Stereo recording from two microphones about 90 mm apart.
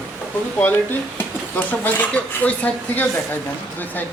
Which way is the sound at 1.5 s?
20° left (ahead or behind).